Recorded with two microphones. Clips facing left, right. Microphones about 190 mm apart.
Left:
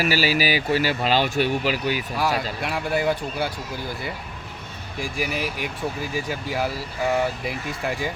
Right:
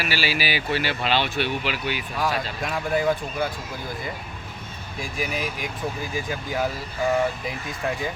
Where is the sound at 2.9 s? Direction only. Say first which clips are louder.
Right 1 dB; 5° left (ahead or behind).